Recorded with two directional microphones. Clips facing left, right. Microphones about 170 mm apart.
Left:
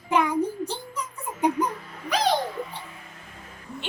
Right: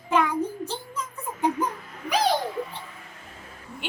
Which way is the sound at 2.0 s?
10° right (ahead or behind).